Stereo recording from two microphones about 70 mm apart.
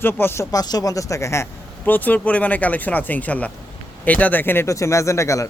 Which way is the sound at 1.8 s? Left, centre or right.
Left.